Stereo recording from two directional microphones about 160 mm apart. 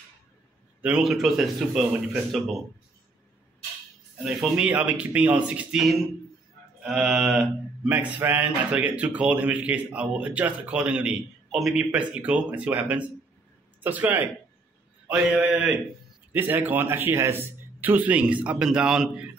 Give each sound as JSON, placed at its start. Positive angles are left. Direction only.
{"t": 0.8, "sound": "speech", "side_deg": -5}
{"t": 4.2, "sound": "speech", "side_deg": -5}